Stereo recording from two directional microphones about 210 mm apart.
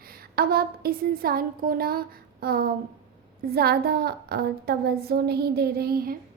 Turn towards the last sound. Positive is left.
turn(degrees=-45)  # may be behind; listen again after turning